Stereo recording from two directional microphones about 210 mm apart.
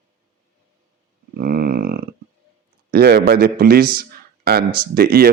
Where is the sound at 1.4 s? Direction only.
45° right (ahead or behind).